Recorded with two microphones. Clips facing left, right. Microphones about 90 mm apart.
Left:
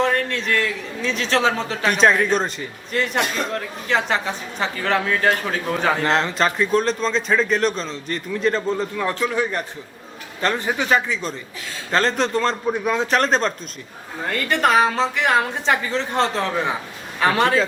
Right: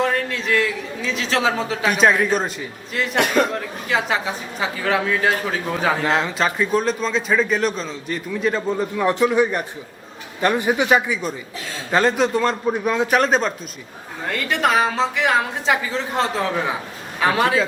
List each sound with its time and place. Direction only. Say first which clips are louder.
0.0 s speech: left 1 dB; 5° right (ahead or behind)
3.2 s a man's voice: right 9 dB; 60° right (ahead or behind)
3.5 s a man's voice: even; 5° right (ahead or behind)